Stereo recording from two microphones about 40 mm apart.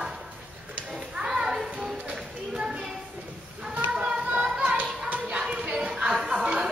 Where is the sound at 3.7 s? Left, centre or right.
Right.